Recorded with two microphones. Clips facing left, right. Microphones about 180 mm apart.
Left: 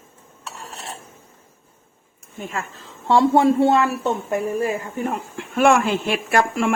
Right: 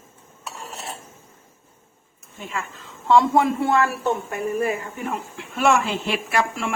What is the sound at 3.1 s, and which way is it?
Speech, 35° left (ahead or behind).